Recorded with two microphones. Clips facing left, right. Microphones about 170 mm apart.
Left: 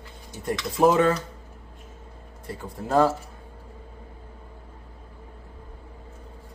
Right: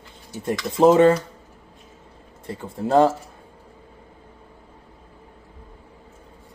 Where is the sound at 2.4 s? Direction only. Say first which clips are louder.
Right 6 dB; 25° right (ahead or behind).